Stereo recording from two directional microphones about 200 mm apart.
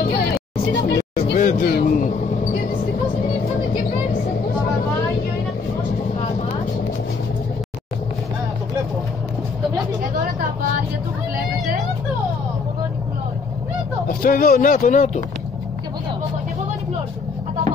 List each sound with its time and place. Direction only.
0.7 s vehicle: 50° left (ahead or behind)
14.0 s speech: 45° left (ahead or behind)